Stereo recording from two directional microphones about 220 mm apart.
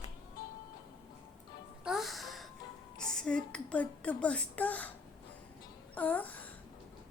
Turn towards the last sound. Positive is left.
turn(degrees=5)  # may be behind; listen again after turning